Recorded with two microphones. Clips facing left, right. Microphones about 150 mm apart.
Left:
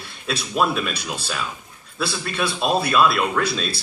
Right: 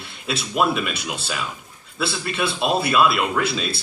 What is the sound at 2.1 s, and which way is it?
Speech, 5° right (ahead or behind).